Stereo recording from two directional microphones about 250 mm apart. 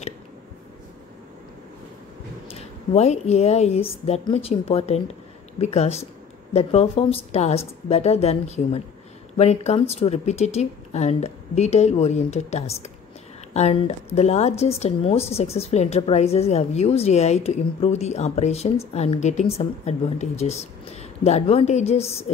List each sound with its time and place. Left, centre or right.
2.5 s a woman's voice: left